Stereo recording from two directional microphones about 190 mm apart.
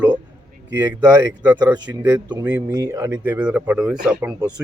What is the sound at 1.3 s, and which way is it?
Speech, 10° right (ahead or behind).